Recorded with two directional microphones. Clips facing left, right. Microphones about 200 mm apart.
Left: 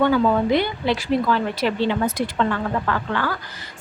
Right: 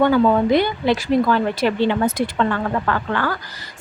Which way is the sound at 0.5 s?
45° right (ahead or behind).